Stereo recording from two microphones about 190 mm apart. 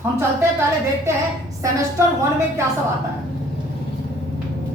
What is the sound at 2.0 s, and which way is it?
Speech, 15° right (ahead or behind).